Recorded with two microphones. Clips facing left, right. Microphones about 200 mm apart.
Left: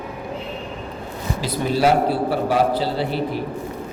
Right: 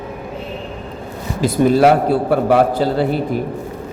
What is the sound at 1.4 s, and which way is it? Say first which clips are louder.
A man's voice: right 9 dB; 50° right (ahead or behind).